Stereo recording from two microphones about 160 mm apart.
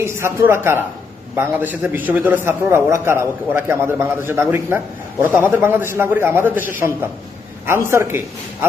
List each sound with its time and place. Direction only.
0.0 s a man's voice: 15° right (ahead or behind)